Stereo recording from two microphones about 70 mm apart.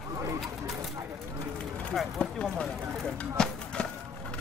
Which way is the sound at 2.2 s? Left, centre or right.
Centre.